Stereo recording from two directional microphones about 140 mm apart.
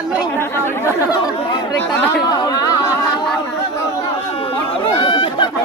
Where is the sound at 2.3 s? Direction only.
25° left (ahead or behind).